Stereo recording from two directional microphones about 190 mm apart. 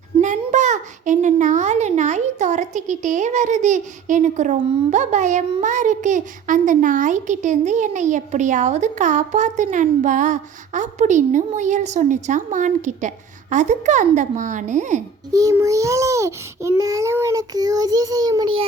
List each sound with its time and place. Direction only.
0.2 s a child's voice: 40° right (ahead or behind)
15.3 s a child's voice: 20° right (ahead or behind)